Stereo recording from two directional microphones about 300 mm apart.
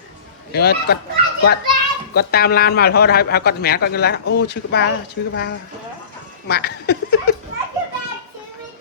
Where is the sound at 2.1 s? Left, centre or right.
Left.